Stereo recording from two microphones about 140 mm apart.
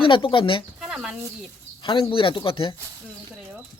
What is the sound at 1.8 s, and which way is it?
Speech, 35° left (ahead or behind).